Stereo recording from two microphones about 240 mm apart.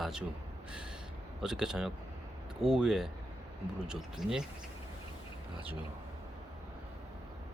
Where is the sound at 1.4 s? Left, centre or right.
Centre.